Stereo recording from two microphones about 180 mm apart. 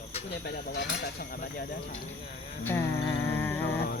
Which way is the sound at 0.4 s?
60° left (ahead or behind).